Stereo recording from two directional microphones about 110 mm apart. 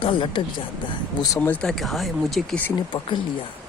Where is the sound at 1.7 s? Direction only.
Centre (ahead or behind).